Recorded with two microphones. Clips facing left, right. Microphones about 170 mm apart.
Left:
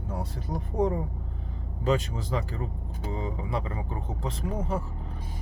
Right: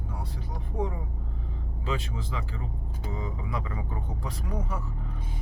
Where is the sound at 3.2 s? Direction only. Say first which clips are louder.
Left 3 dB; 30° left (ahead or behind).